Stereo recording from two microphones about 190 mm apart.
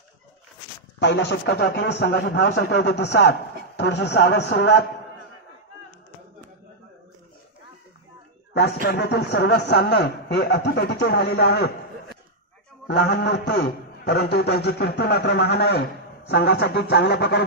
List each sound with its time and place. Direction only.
0.9 s a man's voice: 65° left (ahead or behind)
8.8 s a man's voice: 60° left (ahead or behind)
12.8 s a man's voice: 65° left (ahead or behind)